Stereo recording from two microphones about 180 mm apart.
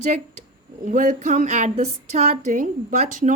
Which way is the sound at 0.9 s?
45° right (ahead or behind).